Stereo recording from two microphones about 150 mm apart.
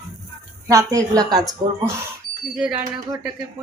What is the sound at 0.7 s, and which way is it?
Speech, 20° right (ahead or behind).